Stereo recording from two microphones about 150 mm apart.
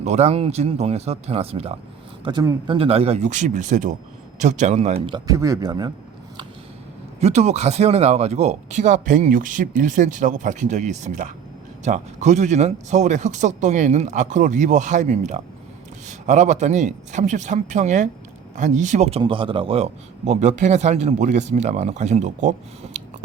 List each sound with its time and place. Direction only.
0.0 s speech: 50° right (ahead or behind)
2.2 s speech: 25° right (ahead or behind)
2.6 s speech: 40° right (ahead or behind)
5.0 s speech: 25° right (ahead or behind)
7.2 s speech: 45° right (ahead or behind)
19.2 s speech: 35° right (ahead or behind); by 23.0 s 55° right (ahead or behind)